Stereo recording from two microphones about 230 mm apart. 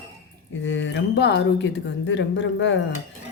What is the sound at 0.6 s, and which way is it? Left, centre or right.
Speech, left.